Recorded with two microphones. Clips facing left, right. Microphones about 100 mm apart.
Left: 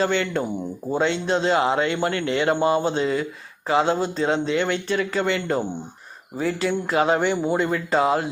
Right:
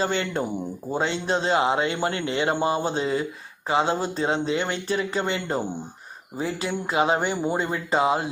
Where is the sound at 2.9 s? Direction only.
35° right (ahead or behind).